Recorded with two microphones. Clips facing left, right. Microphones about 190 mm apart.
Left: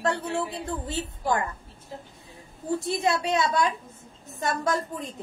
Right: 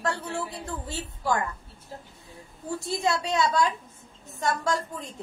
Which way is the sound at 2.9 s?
20° left (ahead or behind).